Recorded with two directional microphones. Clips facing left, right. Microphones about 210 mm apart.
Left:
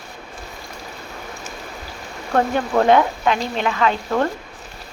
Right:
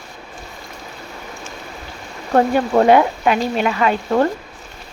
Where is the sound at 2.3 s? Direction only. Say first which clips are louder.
Right 4 dB; 15° right (ahead or behind).